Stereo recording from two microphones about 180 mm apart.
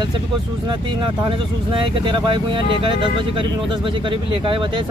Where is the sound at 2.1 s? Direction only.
30° right (ahead or behind).